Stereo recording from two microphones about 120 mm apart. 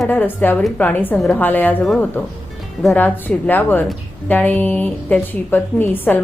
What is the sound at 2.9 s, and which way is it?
A woman's voice, 15° left (ahead or behind).